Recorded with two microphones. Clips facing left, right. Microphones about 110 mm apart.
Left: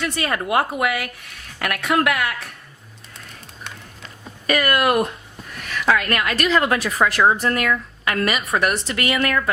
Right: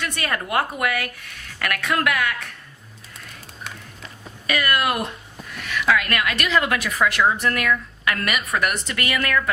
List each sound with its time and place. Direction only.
0.0 s a woman's voice: 25° left (ahead or behind)
4.4 s speech: 45° left (ahead or behind)
5.9 s a woman's voice: 35° left (ahead or behind)